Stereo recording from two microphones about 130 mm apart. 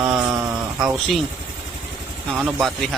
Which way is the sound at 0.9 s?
Centre (ahead or behind).